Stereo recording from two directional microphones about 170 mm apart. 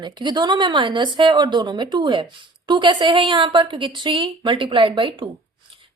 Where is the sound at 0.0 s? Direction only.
25° right (ahead or behind).